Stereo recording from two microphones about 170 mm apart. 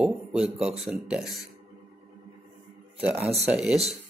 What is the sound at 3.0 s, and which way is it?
Speech, 10° right (ahead or behind).